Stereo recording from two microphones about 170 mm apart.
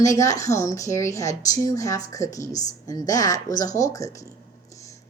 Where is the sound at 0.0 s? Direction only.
20° left (ahead or behind).